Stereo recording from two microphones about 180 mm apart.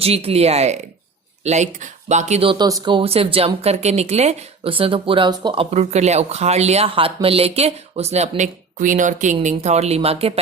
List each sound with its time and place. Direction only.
0.0 s speech: 35° right (ahead or behind)